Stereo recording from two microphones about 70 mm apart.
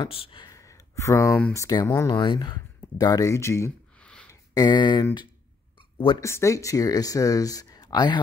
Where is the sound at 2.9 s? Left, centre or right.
Left.